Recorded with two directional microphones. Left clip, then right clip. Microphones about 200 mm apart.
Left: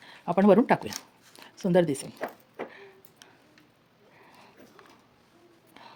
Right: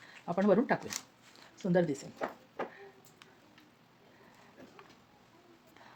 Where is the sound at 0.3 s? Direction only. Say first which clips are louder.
Left 8 dB; 45° left (ahead or behind).